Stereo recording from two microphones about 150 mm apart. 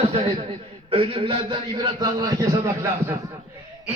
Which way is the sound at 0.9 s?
35° right (ahead or behind).